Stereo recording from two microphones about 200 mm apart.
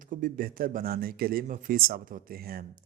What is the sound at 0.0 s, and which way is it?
A man's voice, 40° right (ahead or behind).